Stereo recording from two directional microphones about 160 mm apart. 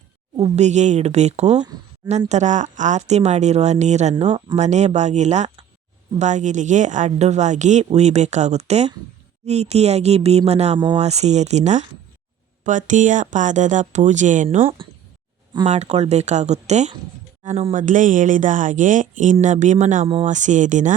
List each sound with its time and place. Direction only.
0.3 s speech: 45° right (ahead or behind)
14.6 s speech: 35° right (ahead or behind)
15.6 s speech: 45° right (ahead or behind)
17.7 s speech: 55° right (ahead or behind)